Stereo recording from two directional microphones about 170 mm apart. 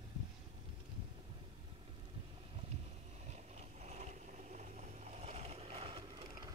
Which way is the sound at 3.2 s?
40° right (ahead or behind).